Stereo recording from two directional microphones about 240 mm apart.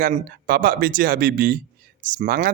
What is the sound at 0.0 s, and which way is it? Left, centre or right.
Speech, right.